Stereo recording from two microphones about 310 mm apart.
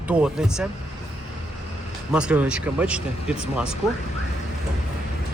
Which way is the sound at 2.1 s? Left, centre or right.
Centre.